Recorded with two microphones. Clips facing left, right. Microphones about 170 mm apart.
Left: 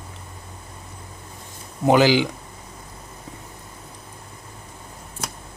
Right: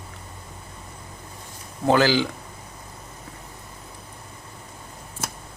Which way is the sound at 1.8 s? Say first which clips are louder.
Left 3 dB; 15° left (ahead or behind).